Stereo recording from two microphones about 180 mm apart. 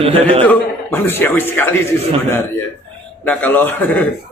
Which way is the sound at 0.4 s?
10° left (ahead or behind).